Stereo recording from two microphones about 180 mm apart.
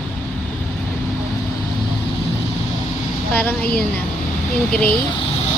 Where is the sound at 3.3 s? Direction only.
5° left (ahead or behind).